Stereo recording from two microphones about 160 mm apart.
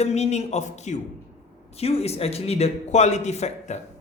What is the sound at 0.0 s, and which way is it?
A man's voice, 45° left (ahead or behind).